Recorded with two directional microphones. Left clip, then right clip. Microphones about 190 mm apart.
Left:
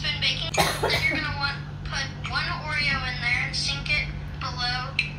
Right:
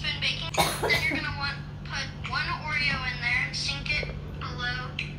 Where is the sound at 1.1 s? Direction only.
10° left (ahead or behind).